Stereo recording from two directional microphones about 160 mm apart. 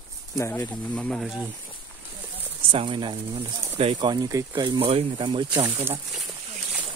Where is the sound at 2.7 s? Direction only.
30° right (ahead or behind).